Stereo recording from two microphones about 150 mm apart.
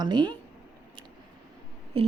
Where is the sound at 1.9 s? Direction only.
40° right (ahead or behind).